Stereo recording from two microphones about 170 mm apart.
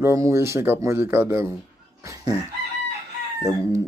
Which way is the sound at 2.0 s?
20° right (ahead or behind).